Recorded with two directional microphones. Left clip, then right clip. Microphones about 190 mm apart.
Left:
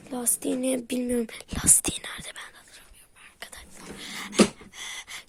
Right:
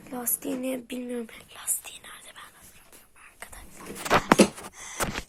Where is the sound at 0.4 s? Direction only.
45° left (ahead or behind).